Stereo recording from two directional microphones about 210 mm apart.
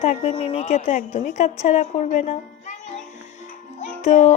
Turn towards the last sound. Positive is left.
turn(degrees=35)  # may be behind; listen again after turning